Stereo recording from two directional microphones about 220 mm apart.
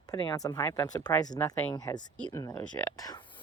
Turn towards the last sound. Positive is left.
turn(degrees=15)  # may be behind; listen again after turning